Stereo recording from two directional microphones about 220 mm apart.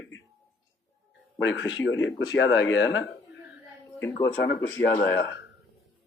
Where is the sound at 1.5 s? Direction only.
60° left (ahead or behind).